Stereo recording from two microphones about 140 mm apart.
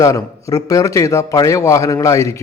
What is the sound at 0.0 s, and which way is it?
A man's voice, 25° left (ahead or behind).